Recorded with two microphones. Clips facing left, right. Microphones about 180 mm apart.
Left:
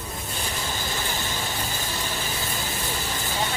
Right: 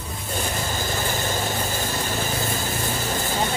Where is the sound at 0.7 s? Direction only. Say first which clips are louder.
Right 4 dB; 45° right (ahead or behind).